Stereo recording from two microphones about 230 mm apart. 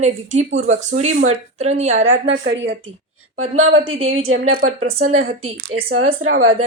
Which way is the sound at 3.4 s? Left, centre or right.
Right.